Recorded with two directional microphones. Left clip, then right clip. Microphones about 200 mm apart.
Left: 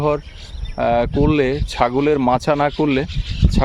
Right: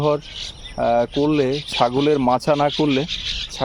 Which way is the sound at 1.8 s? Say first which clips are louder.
Left 1 dB; 10° left (ahead or behind).